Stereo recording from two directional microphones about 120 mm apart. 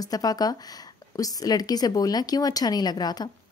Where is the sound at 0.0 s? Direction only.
30° left (ahead or behind).